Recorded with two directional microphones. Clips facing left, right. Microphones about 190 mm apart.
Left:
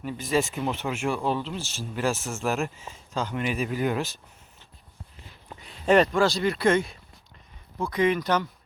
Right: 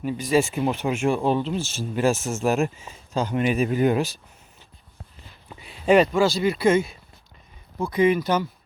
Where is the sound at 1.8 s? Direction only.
20° right (ahead or behind).